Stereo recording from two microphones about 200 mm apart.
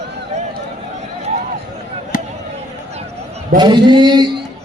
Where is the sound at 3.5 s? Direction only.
20° right (ahead or behind).